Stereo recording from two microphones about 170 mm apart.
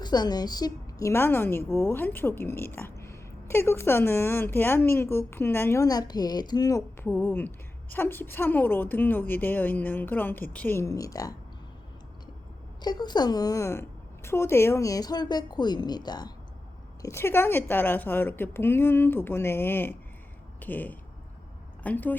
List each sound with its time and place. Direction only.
0.0 s a woman's voice: 25° left (ahead or behind)
12.8 s a woman's voice: 25° left (ahead or behind)